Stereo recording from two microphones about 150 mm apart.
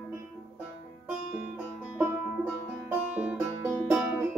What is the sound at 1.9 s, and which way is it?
Music, 15° right (ahead or behind).